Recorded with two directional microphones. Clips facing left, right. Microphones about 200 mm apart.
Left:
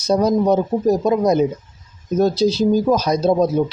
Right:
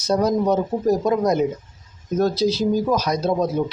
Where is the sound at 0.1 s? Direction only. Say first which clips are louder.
Left 3 dB; 15° left (ahead or behind).